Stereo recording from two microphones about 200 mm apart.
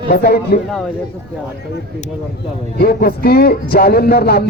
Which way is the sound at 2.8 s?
50° left (ahead or behind).